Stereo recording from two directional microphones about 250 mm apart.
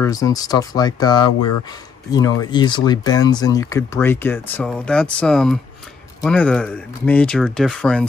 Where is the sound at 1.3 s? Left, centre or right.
Left.